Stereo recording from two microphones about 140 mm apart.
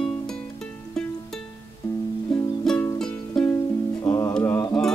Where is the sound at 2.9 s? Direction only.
5° left (ahead or behind).